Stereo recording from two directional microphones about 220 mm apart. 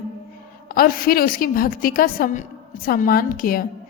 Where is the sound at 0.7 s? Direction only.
40° left (ahead or behind).